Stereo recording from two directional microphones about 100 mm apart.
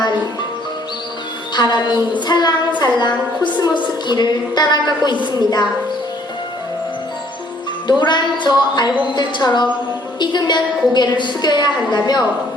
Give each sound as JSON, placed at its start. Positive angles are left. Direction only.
{"t": 1.5, "sound": "a woman's voice", "side_deg": 45}
{"t": 7.9, "sound": "a woman's voice", "side_deg": 50}